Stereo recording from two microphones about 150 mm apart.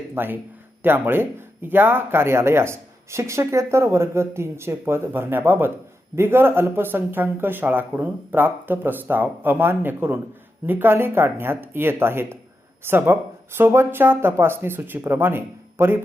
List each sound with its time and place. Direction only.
0.1 s speech: 15° right (ahead or behind)